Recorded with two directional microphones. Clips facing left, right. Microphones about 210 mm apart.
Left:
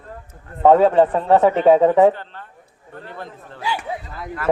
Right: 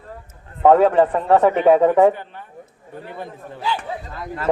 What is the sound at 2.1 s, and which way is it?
A man's voice, 15° right (ahead or behind).